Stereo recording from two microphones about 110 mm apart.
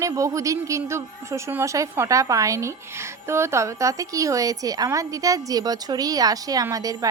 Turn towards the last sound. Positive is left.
turn(degrees=-30)  # may be behind; listen again after turning